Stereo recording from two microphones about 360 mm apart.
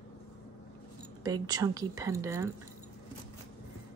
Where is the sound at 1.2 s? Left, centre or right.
Centre.